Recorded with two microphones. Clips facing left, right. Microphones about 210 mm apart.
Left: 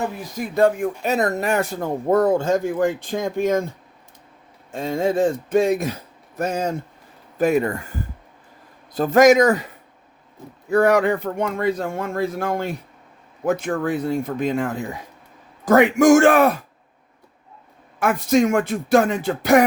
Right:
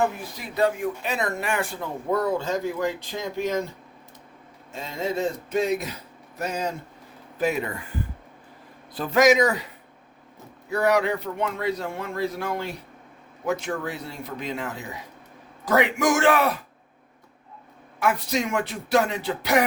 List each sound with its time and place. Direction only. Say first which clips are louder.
0.3 s speech: left 7 dB; 50° left (ahead or behind)
4.7 s speech: left 7 dB; 50° left (ahead or behind)
10.7 s speech: left 5 dB; 50° left (ahead or behind)
18.0 s speech: left 7 dB; 50° left (ahead or behind)